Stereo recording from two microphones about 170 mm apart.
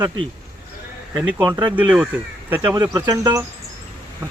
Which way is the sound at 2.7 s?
25° right (ahead or behind).